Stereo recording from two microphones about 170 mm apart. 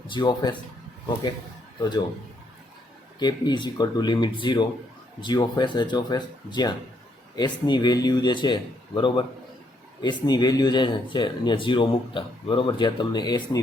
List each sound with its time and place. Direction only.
0.1 s speech: 25° left (ahead or behind)
3.2 s speech: 25° left (ahead or behind)